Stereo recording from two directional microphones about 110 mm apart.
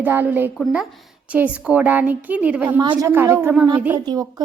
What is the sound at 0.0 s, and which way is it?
A woman's voice, 15° right (ahead or behind).